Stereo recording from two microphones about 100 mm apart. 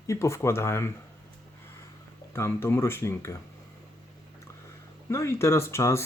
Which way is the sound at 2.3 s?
25° left (ahead or behind).